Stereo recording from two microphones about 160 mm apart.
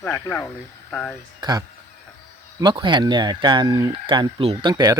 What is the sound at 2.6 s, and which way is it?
Speech, 30° right (ahead or behind).